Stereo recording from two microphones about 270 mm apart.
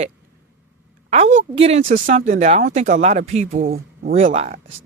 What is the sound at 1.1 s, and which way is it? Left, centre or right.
Speech, right.